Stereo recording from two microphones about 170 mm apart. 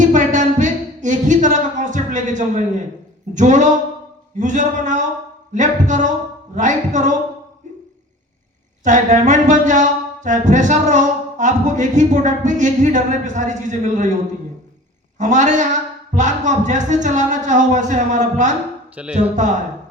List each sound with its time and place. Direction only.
0.0 s a sound: 45° right (ahead or behind)
3.3 s music: 45° right (ahead or behind)
8.8 s music: 45° right (ahead or behind)
15.2 s music: 45° right (ahead or behind)
19.0 s speech: 5° right (ahead or behind)